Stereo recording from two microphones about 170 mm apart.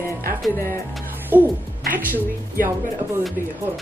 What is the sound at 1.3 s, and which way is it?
Music, 10° right (ahead or behind).